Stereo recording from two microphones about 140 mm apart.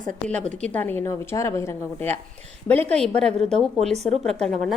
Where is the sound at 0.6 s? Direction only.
10° left (ahead or behind).